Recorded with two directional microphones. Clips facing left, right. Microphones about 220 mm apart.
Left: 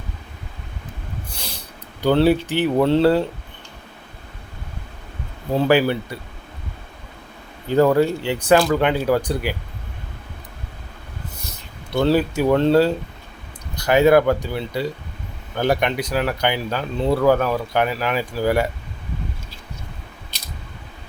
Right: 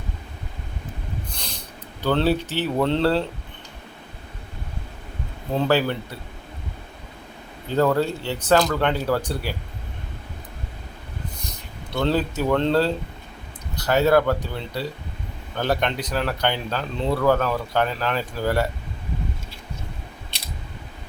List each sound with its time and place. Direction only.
1.3 s snort: 10° left (ahead or behind)
2.0 s speech: 15° left (ahead or behind)
5.5 s speech: 10° left (ahead or behind)
7.7 s speech: 10° left (ahead or behind)
11.9 s speech: 10° left (ahead or behind)